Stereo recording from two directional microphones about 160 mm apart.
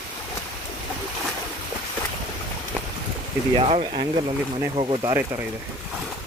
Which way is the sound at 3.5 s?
35° right (ahead or behind).